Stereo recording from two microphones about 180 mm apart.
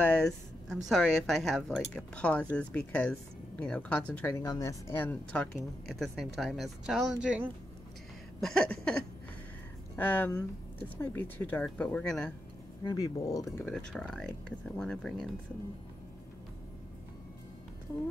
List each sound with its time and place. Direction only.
0.0 s a woman's voice: 5° left (ahead or behind)
12.8 s speech: 20° left (ahead or behind)
13.7 s a woman's voice: 5° left (ahead or behind)